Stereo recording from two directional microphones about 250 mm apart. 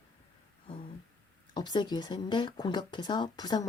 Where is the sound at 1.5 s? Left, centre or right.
Centre.